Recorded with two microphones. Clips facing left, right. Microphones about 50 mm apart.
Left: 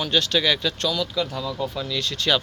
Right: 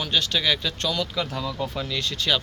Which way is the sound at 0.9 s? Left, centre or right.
Right.